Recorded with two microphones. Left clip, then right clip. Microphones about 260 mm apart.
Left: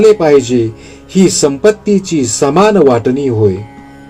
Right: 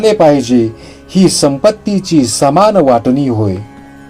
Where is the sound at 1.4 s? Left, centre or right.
Right.